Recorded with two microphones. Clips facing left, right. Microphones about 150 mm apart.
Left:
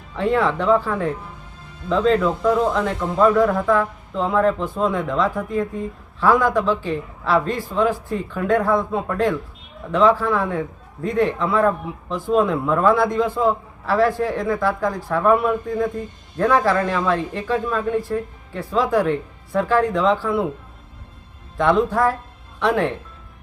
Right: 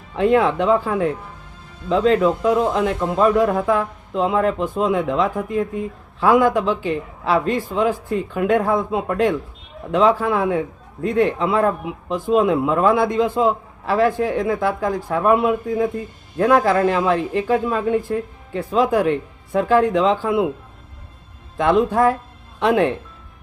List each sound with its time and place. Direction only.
0.2 s speech: 20° right (ahead or behind)
18.5 s speech: 20° right (ahead or behind)
21.6 s speech: 15° right (ahead or behind)